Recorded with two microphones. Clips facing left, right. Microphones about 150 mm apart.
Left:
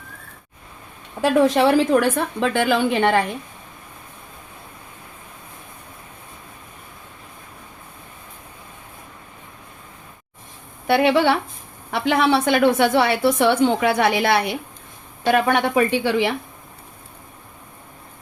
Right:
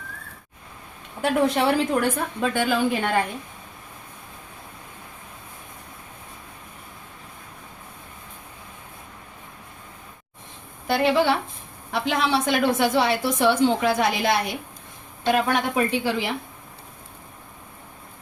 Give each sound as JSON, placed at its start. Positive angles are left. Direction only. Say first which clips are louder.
{"t": 1.2, "sound": "a woman's voice", "louder": "left 5 dB", "side_deg": 90}
{"t": 10.8, "sound": "a woman's voice", "louder": "left 4 dB", "side_deg": 70}